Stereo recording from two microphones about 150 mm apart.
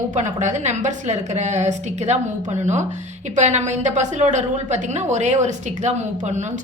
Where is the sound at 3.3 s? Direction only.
50° right (ahead or behind).